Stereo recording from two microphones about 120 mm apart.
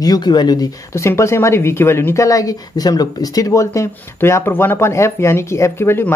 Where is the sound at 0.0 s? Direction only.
35° left (ahead or behind).